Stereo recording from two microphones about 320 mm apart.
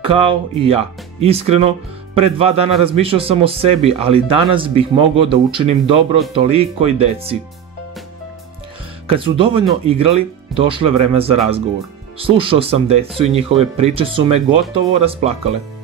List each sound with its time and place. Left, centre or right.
0.0 s a man's voice: centre
9.0 s a man's voice: centre